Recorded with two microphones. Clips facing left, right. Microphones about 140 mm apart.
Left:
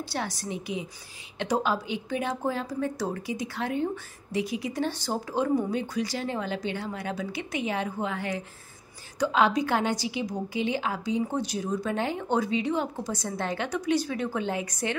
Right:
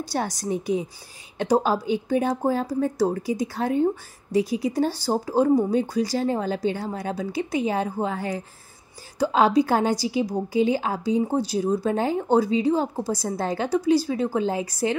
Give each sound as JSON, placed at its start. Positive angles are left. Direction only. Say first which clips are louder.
{"t": 0.0, "sound": "a woman's voice", "louder": "right 5 dB", "side_deg": -40}